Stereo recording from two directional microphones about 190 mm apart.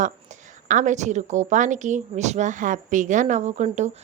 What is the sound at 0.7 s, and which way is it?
Speech, 40° right (ahead or behind).